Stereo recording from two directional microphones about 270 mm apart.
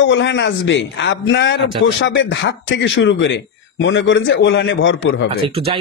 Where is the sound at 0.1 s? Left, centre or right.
Left.